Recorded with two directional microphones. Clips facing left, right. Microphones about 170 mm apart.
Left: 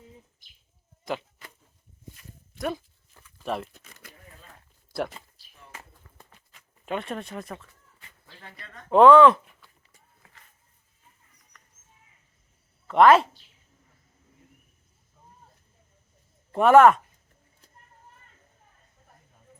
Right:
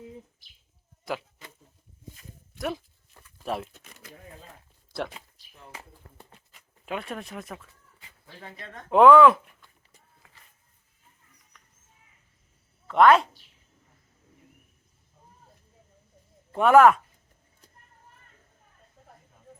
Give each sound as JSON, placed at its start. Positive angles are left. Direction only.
{"t": 2.6, "sound": "speech", "side_deg": 0}
{"t": 4.9, "sound": "speech", "side_deg": 0}
{"t": 6.0, "sound": "a sound", "side_deg": -45}
{"t": 6.5, "sound": "speech", "side_deg": -5}
{"t": 8.9, "sound": "speech", "side_deg": -5}
{"t": 12.9, "sound": "speech", "side_deg": 0}
{"t": 16.5, "sound": "speech", "side_deg": 0}